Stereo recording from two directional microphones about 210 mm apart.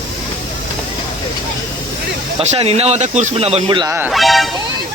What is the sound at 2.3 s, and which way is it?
Speech, 30° right (ahead or behind).